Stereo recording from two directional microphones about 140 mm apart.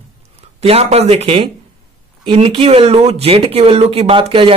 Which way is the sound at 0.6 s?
50° right (ahead or behind).